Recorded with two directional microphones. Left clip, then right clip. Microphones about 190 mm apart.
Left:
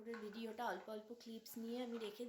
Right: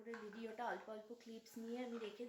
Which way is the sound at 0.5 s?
20° left (ahead or behind).